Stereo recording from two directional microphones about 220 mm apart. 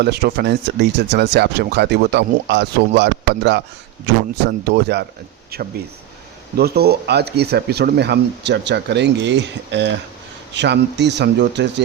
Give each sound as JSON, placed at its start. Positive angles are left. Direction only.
{"t": 0.0, "sound": "speech", "side_deg": -45}